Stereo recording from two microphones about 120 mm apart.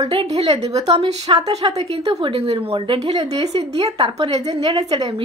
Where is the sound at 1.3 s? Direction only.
45° right (ahead or behind).